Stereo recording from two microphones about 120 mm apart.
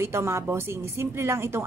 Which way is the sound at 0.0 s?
20° right (ahead or behind).